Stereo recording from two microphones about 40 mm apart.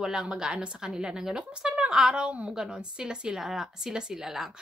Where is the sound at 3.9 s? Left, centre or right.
Centre.